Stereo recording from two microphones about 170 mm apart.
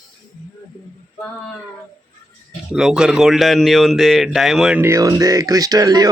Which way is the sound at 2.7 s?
5° right (ahead or behind).